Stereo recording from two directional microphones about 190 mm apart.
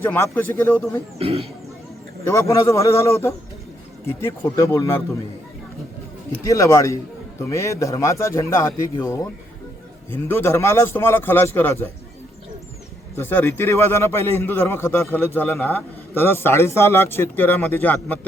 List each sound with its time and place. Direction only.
0.0 s a man's voice: 10° left (ahead or behind)
1.2 s speech: 30° right (ahead or behind)
2.2 s a man's voice: 15° left (ahead or behind)
6.4 s a man's voice: 15° left (ahead or behind)
13.1 s a man's voice: 10° left (ahead or behind)